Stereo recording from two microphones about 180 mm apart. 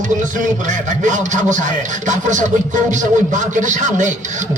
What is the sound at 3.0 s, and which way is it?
A man's voice, 45° right (ahead or behind).